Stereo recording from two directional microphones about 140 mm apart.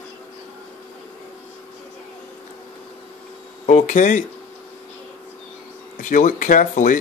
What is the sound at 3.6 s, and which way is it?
Speech, 60° left (ahead or behind).